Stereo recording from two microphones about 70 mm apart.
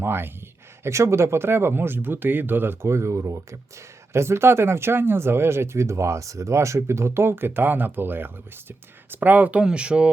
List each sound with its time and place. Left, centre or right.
0.0 s speech: right
4.1 s speech: right; by 10.1 s centre